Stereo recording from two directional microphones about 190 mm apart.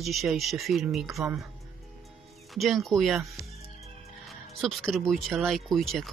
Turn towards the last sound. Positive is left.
turn(degrees=0)  # may be behind; listen again after turning